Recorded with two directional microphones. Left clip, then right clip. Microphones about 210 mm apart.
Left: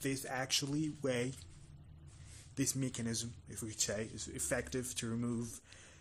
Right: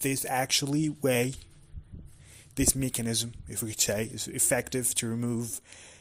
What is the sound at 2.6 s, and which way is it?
Speech, 35° right (ahead or behind).